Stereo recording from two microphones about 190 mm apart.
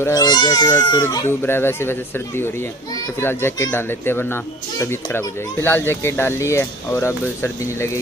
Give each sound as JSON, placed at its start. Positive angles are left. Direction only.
{"t": 0.0, "sound": "speech", "side_deg": 20}